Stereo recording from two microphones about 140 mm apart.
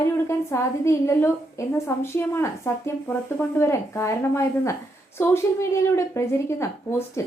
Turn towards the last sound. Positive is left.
turn(degrees=20)  # may be behind; listen again after turning